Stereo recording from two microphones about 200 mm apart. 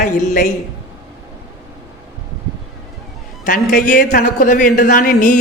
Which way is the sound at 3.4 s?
40° left (ahead or behind).